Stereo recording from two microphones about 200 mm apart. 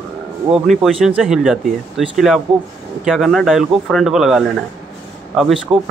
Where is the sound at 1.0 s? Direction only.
Centre (ahead or behind).